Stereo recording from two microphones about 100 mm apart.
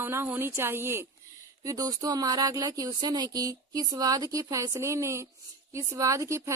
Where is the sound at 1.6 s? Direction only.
35° right (ahead or behind).